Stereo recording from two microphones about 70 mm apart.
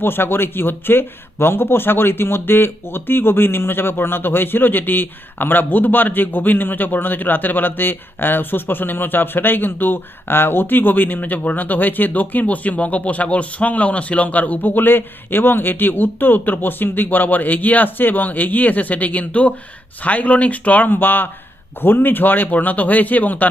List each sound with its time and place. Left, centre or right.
0.0 s speech: left